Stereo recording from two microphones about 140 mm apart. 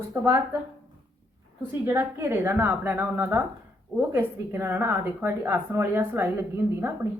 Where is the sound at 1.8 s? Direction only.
20° right (ahead or behind).